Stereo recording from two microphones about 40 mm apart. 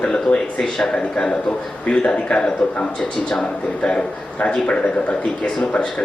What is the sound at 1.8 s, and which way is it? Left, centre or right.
A man's voice, left.